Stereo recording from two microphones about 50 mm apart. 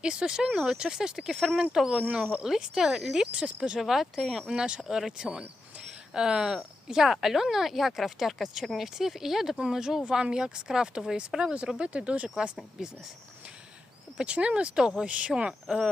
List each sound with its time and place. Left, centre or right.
0.0 s speech: centre
3.8 s speech: centre; by 12.3 s right
12.8 s speech: centre
14.2 s speech: right